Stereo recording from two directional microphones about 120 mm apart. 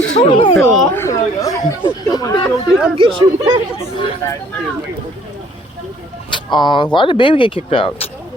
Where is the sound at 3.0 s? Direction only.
45° right (ahead or behind).